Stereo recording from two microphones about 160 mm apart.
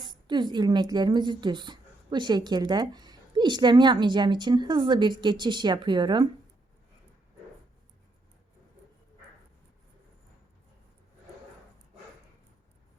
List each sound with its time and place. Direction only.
0.0 s speech: 30° right (ahead or behind)